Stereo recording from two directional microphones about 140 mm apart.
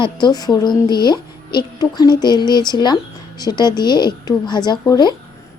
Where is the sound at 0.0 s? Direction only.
30° left (ahead or behind).